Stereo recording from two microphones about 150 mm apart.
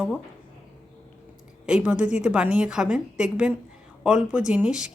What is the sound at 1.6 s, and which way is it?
Speech, 5° right (ahead or behind).